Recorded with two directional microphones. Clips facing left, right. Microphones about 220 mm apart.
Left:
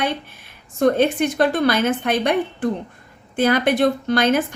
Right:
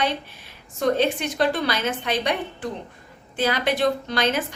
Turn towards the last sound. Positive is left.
turn(degrees=50)  # may be behind; listen again after turning